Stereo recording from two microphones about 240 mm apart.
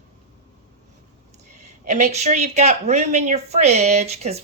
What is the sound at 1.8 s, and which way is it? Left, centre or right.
Speech, right.